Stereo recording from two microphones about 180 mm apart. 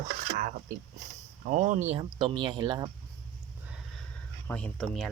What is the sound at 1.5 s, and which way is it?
Speech, 40° right (ahead or behind).